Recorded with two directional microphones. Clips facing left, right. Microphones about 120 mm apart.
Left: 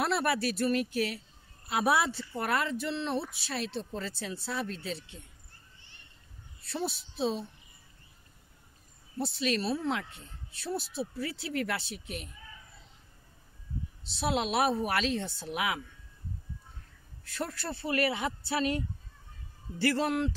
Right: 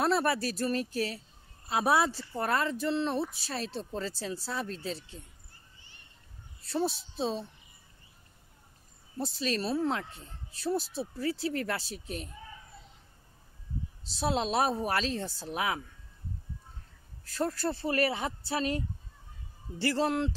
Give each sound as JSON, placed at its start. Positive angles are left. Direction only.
{"t": 0.0, "sound": "speech", "side_deg": -35}
{"t": 6.6, "sound": "a woman's voice", "side_deg": -35}
{"t": 9.2, "sound": "speech", "side_deg": -35}
{"t": 14.0, "sound": "speech", "side_deg": -35}
{"t": 17.2, "sound": "speech", "side_deg": -35}
{"t": 19.8, "sound": "speech", "side_deg": -30}